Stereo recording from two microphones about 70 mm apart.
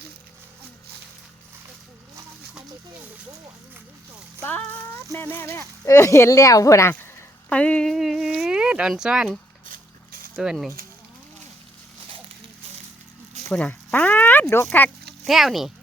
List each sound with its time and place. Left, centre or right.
5.1 s speech: left
5.8 s speech: left
7.5 s speech: centre
7.9 s a sound: centre
8.9 s speech: centre
10.3 s speech: centre
13.5 s a sound: left
14.8 s speech: left
15.2 s speech: centre